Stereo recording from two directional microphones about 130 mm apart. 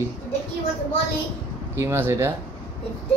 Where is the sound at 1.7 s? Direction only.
20° right (ahead or behind).